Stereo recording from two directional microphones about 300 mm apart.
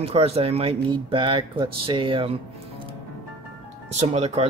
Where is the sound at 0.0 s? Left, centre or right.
Centre.